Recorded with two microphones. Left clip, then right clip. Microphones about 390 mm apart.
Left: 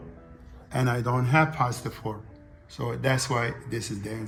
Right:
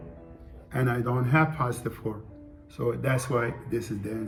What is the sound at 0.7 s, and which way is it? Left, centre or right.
Speech, left.